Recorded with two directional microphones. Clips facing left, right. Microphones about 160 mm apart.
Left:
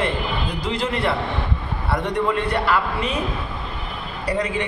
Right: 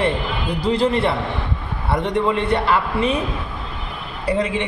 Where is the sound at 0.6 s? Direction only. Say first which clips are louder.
Right 7 dB; 30° right (ahead or behind).